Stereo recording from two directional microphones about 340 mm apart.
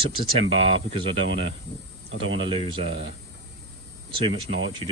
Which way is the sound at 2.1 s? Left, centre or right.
Centre.